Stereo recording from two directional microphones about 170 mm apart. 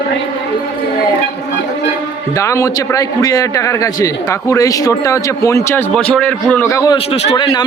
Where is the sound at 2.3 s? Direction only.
15° left (ahead or behind).